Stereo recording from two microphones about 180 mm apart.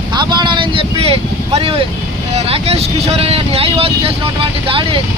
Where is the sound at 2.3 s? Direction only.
35° right (ahead or behind).